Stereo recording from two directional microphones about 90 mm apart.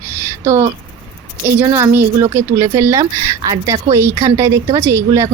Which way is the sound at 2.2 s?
30° right (ahead or behind).